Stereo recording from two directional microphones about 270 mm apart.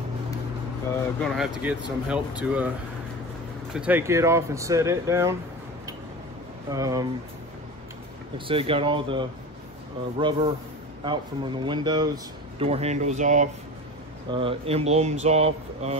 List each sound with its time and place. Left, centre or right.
1.2 s speech: centre
3.7 s speech: centre
6.7 s speech: centre
8.5 s speech: centre